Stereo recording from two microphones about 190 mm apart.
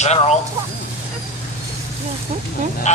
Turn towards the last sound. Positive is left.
turn(degrees=35)  # may be behind; listen again after turning